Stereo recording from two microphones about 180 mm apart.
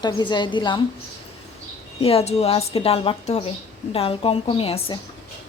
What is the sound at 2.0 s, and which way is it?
A woman's voice, 35° left (ahead or behind).